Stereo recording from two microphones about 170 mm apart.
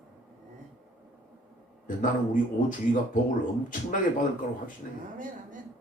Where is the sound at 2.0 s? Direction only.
50° left (ahead or behind).